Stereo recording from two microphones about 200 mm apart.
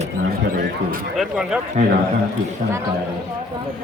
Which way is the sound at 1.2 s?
5° right (ahead or behind).